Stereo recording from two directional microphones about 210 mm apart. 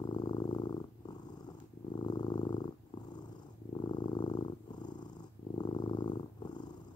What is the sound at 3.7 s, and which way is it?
Purr, 20° left (ahead or behind).